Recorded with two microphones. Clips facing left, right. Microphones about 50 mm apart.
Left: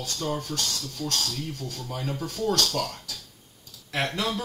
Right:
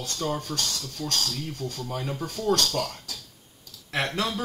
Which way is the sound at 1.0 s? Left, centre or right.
Centre.